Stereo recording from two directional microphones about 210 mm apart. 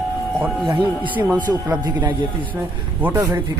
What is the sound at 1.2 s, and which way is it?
Speech, 5° right (ahead or behind).